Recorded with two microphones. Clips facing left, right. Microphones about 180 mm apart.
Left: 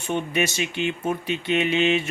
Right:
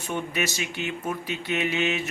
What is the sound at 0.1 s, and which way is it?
Mantra, 25° left (ahead or behind).